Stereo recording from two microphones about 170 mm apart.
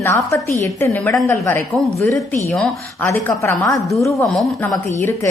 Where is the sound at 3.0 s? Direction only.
15° left (ahead or behind).